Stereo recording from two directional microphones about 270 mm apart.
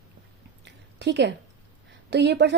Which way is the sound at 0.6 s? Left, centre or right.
Right.